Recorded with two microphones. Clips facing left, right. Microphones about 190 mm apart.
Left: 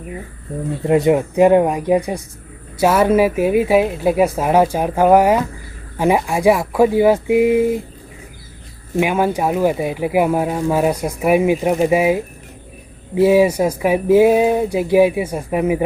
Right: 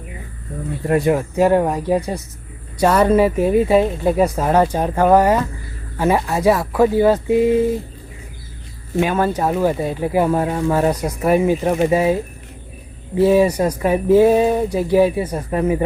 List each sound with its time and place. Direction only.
0.9 s speech: 20° left (ahead or behind)
9.0 s speech: 10° left (ahead or behind)